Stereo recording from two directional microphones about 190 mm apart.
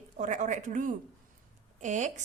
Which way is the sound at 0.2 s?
40° right (ahead or behind).